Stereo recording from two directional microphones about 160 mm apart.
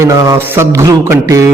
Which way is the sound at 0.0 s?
20° right (ahead or behind).